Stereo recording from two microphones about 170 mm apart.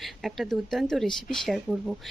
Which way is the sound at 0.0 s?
Centre (ahead or behind).